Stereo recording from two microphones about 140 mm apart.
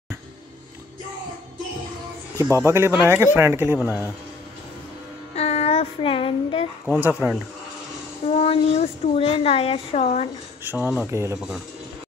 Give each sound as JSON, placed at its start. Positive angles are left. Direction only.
{"t": 2.3, "sound": "speech", "side_deg": -20}
{"t": 5.3, "sound": "child singing", "side_deg": 50}
{"t": 6.9, "sound": "speech", "side_deg": -10}
{"t": 8.3, "sound": "speech", "side_deg": 45}
{"t": 10.6, "sound": "speech", "side_deg": -15}
{"t": 11.3, "sound": "speech", "side_deg": -5}